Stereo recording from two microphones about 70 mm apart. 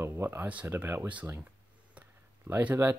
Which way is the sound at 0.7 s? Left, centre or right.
Right.